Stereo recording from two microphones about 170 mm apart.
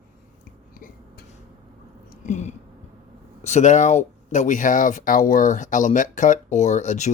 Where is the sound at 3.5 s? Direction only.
45° left (ahead or behind).